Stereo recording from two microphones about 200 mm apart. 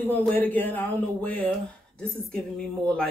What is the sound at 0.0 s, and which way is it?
Speech, 10° left (ahead or behind).